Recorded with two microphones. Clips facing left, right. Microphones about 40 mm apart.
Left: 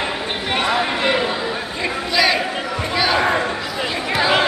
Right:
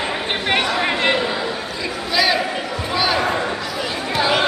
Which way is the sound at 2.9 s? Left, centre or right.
Centre.